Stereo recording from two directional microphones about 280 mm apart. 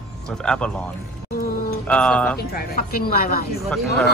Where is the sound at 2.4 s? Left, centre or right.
Left.